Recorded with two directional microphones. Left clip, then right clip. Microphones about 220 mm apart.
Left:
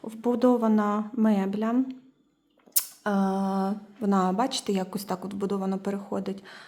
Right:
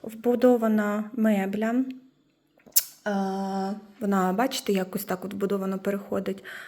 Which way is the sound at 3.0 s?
30° left (ahead or behind).